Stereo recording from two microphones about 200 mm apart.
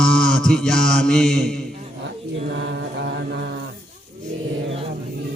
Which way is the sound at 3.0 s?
60° right (ahead or behind).